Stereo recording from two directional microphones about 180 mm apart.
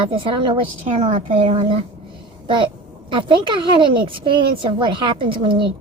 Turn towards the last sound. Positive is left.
turn(degrees=-30)  # may be behind; listen again after turning